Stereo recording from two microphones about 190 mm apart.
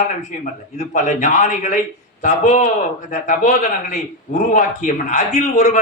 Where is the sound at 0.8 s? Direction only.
40° left (ahead or behind).